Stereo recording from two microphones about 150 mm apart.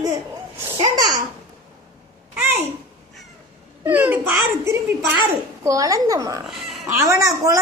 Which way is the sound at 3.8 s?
10° right (ahead or behind).